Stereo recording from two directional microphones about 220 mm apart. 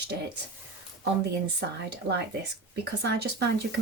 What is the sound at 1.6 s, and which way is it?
Speech, 50° right (ahead or behind).